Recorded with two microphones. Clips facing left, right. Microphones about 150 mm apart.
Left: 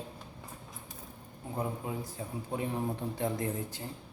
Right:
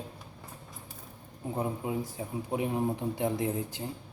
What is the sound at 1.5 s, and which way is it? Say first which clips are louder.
Speech: right 3 dB; 20° right (ahead or behind).